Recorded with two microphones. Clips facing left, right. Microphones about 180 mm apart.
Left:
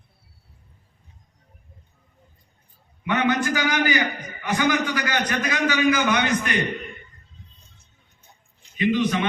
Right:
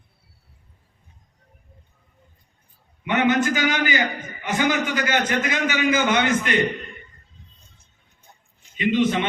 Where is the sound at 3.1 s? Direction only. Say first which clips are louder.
Right 2 dB; 20° right (ahead or behind).